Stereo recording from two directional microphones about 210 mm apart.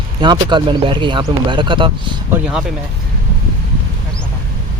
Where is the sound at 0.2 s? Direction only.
20° right (ahead or behind).